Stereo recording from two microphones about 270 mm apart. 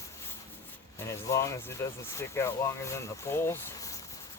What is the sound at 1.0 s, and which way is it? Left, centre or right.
Speech, centre.